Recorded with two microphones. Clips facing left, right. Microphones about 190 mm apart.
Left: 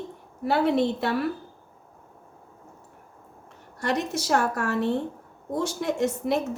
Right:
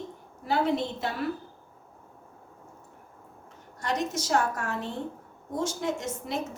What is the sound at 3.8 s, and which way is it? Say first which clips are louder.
A woman's voice: left 3 dB; 65° left (ahead or behind).